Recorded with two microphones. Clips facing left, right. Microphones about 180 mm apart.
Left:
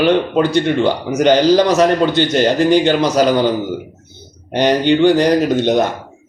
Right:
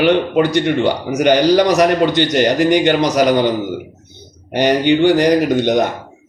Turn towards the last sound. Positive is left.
turn(degrees=-15)  # may be behind; listen again after turning